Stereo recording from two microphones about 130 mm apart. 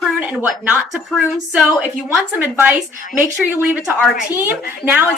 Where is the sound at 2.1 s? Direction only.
15° right (ahead or behind).